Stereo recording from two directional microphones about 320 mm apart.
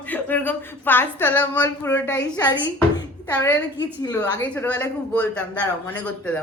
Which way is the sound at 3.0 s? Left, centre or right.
Centre.